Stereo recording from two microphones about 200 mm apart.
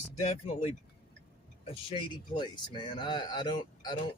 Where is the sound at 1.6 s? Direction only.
25° left (ahead or behind).